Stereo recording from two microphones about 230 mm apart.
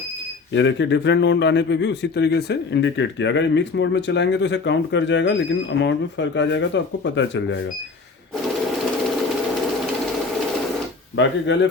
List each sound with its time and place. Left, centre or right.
0.5 s a man's voice: left
11.2 s a man's voice: left